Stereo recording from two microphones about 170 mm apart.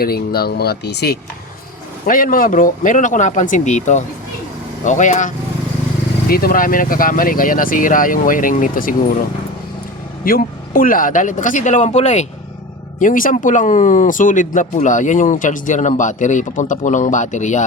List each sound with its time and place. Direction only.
0.0 s speech: 65° left (ahead or behind)
2.0 s speech: 55° left (ahead or behind)
6.2 s speech: 60° left (ahead or behind)
10.2 s speech: 55° left (ahead or behind); by 12.2 s 40° left (ahead or behind)
13.0 s speech: 50° left (ahead or behind)